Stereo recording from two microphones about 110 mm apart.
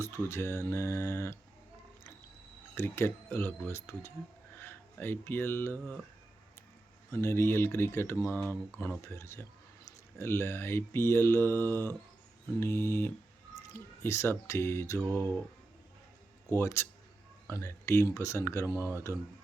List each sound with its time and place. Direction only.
0.0 s speech: 25° left (ahead or behind)
2.7 s speech: 20° left (ahead or behind)
7.1 s speech: 20° left (ahead or behind)
14.9 s mantra: 5° left (ahead or behind)
16.6 s speech: 25° left (ahead or behind)
18.8 s speech: 15° right (ahead or behind)